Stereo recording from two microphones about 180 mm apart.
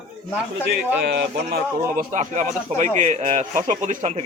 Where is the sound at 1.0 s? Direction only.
65° right (ahead or behind).